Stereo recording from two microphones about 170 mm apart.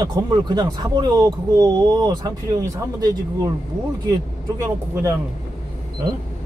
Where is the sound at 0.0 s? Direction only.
25° right (ahead or behind).